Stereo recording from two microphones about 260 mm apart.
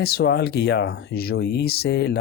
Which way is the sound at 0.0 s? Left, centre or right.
Left.